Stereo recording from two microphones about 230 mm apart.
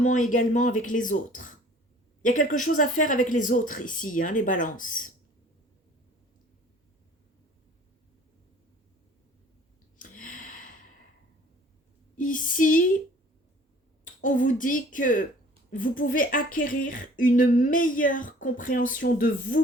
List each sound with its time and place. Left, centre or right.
0.0 s speech: left
10.0 s a sound: left
12.1 s speech: left
14.0 s speech: left